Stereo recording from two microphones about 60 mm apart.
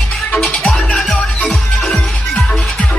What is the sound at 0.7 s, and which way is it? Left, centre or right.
Music, centre.